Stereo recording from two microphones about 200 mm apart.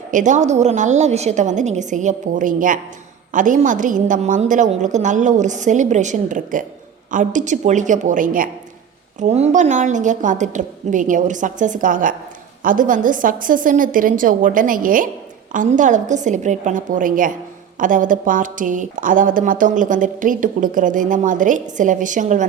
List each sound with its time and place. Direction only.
0.1 s a woman's voice: 40° right (ahead or behind)